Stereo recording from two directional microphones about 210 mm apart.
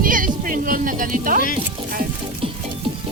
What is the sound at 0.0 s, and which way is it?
Music, 40° right (ahead or behind).